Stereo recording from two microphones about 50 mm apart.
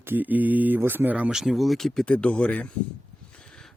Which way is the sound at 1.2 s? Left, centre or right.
Centre.